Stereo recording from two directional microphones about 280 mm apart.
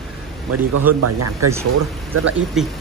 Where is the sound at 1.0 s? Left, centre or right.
Right.